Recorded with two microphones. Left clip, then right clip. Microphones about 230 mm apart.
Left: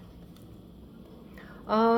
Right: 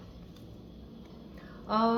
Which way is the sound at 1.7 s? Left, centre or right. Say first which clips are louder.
Left 4 dB; left.